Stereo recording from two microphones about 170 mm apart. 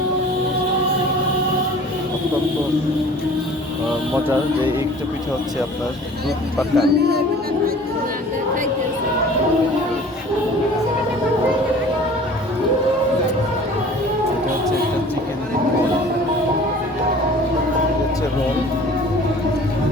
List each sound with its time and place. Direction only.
6.7 s speech: 75° right (ahead or behind)